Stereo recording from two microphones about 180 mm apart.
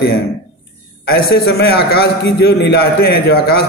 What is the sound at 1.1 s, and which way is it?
A man's voice, 60° left (ahead or behind).